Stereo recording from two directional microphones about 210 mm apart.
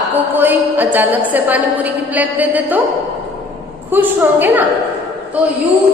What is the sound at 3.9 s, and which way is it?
Speech, 10° right (ahead or behind).